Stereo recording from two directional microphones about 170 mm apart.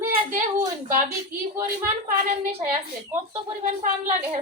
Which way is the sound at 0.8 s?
15° right (ahead or behind).